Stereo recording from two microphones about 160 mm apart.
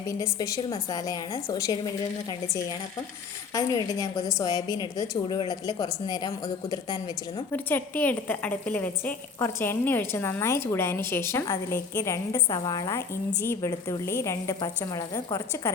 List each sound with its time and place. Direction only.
0.2 s a woman's voice: 20° left (ahead or behind)
3.5 s a woman's voice: 25° left (ahead or behind)
7.5 s a woman's voice: 10° left (ahead or behind)